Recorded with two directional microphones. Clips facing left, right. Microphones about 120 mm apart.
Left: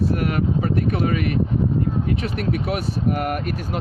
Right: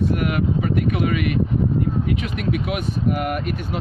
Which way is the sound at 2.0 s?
35° left (ahead or behind).